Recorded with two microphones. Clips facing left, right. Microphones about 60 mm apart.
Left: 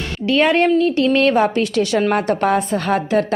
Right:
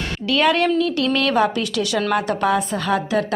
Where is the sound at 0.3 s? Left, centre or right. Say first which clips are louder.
Left 3 dB; left.